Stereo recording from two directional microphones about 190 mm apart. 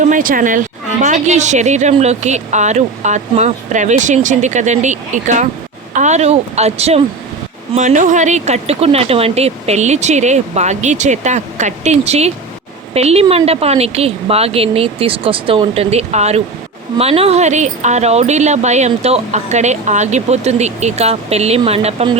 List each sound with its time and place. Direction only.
0.0 s speech: 45° right (ahead or behind)